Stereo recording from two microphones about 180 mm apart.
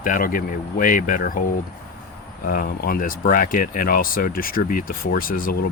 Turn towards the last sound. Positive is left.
turn(degrees=55)  # may be behind; listen again after turning